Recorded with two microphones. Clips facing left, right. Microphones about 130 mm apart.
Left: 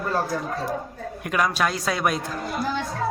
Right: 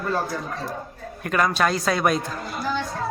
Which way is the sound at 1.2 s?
10° left (ahead or behind).